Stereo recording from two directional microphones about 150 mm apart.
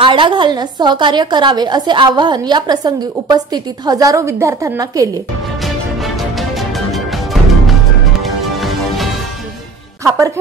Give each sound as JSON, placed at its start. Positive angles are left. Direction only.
{"t": 0.0, "sound": "a woman's voice", "side_deg": -35}
{"t": 6.1, "sound": "music", "side_deg": 0}
{"t": 8.2, "sound": "music", "side_deg": 0}
{"t": 10.0, "sound": "a woman's voice", "side_deg": -20}